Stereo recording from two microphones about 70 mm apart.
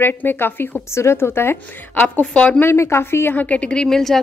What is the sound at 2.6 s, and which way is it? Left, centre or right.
A woman's voice, left.